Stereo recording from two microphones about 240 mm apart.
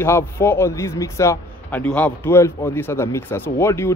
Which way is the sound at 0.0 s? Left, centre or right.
Centre.